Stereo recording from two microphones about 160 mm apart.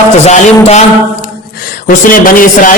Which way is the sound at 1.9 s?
60° left (ahead or behind).